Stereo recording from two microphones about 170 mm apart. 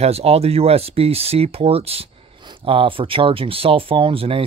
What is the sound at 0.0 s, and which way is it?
Speech, 35° right (ahead or behind).